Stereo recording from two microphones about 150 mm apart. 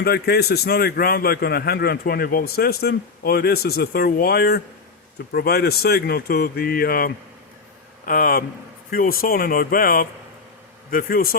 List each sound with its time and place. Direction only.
0.0 s a man's voice: 90° left
8.0 s speech: 70° left (ahead or behind)